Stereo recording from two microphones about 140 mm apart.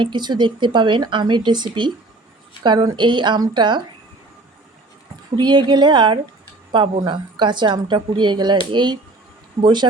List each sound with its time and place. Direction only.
0.0 s a woman's voice: 35° right (ahead or behind)
5.4 s a woman's voice: 30° right (ahead or behind)